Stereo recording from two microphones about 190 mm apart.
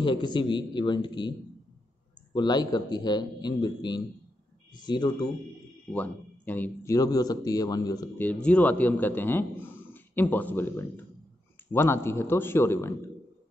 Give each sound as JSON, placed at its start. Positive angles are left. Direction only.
{"t": 0.0, "sound": "a man's voice", "side_deg": 25}
{"t": 2.3, "sound": "a man's voice", "side_deg": 20}
{"t": 5.9, "sound": "speech", "side_deg": 10}